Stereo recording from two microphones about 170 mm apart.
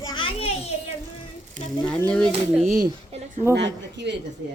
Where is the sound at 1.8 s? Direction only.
5° left (ahead or behind).